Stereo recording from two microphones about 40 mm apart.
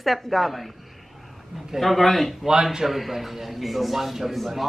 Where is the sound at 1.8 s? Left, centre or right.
Centre.